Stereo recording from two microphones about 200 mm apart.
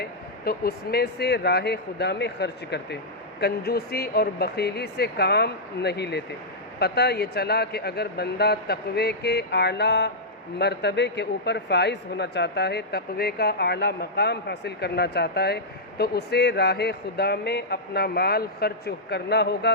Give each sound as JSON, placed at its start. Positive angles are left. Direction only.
{"t": 0.0, "sound": "a man's voice", "side_deg": 50}